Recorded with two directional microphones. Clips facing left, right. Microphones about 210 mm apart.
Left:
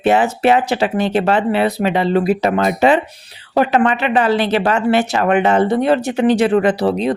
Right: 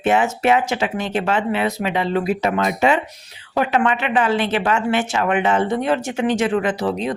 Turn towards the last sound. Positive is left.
turn(degrees=35)  # may be behind; listen again after turning